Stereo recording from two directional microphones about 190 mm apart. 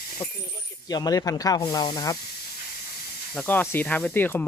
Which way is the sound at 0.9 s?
20° left (ahead or behind).